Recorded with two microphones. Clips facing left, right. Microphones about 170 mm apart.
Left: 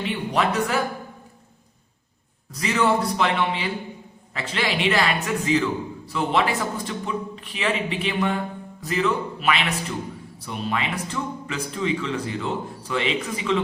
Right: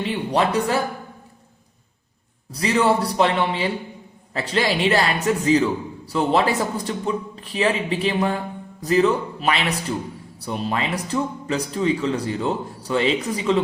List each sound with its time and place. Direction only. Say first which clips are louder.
0.0 s a man's voice: right 3 dB; 35° right (ahead or behind)
2.5 s a man's voice: right 3 dB; 35° right (ahead or behind)